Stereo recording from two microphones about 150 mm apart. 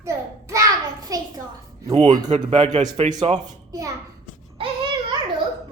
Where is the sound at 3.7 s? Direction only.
25° right (ahead or behind).